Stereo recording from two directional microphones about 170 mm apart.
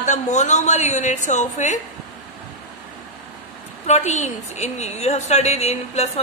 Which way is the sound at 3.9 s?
45° left (ahead or behind).